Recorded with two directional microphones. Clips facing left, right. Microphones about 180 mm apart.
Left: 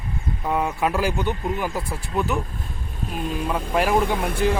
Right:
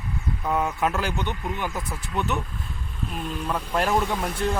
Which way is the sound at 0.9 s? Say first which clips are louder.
Left 4 dB; 15° left (ahead or behind).